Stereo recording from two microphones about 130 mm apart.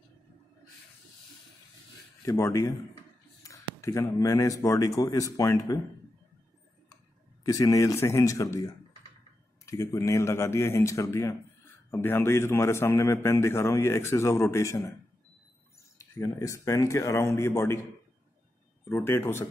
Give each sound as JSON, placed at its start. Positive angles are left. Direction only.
{"t": 2.2, "sound": "a man's voice", "side_deg": 25}
{"t": 7.4, "sound": "a man's voice", "side_deg": 25}
{"t": 16.0, "sound": "a man's voice", "side_deg": 25}
{"t": 18.9, "sound": "a man's voice", "side_deg": 15}